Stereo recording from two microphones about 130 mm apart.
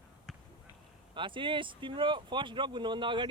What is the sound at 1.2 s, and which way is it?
Speech, 40° right (ahead or behind).